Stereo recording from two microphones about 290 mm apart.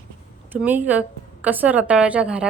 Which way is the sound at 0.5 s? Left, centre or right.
Centre.